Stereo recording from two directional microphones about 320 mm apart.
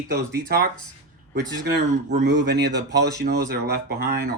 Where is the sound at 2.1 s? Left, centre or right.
Right.